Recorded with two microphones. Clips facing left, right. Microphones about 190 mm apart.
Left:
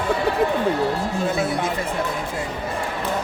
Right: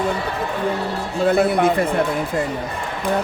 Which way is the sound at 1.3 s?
60° right (ahead or behind).